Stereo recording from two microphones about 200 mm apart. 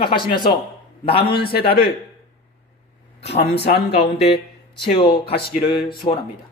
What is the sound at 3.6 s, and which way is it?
Speech, 55° left (ahead or behind).